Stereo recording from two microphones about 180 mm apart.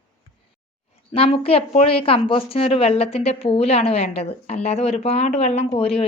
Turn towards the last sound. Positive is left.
turn(degrees=35)  # may be behind; listen again after turning